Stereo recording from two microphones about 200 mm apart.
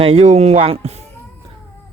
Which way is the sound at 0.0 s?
30° right (ahead or behind).